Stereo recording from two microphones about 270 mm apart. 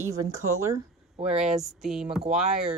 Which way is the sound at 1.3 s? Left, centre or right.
Right.